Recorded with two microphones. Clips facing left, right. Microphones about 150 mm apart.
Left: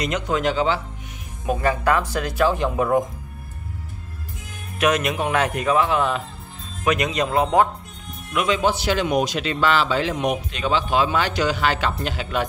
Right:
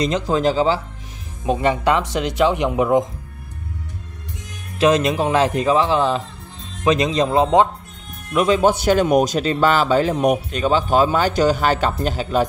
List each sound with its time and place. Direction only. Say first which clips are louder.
0.0 s speech: right 4 dB; 30° right (ahead or behind)
1.4 s speech: right 3 dB; 25° right (ahead or behind)
4.7 s speech: right 5 dB; 30° right (ahead or behind)
8.3 s a man's voice: right 5 dB; 35° right (ahead or behind)